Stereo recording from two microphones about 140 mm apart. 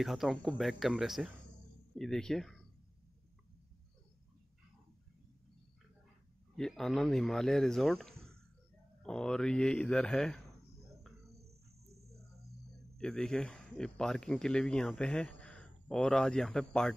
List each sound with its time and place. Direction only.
0.0 s a man's voice: centre (ahead or behind)
6.5 s a man's voice: centre (ahead or behind)
11.1 s cricket: centre (ahead or behind)
11.8 s cricket: 50° right (ahead or behind)
12.9 s a man's voice: 5° left (ahead or behind)